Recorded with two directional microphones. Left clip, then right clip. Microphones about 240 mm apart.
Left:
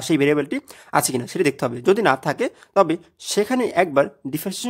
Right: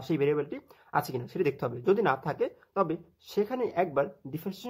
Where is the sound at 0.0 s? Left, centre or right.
Left.